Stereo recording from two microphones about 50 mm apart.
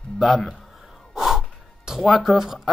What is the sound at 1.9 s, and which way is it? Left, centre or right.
Speech, centre.